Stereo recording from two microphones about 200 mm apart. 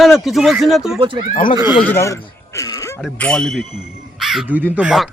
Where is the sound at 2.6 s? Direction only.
15° left (ahead or behind).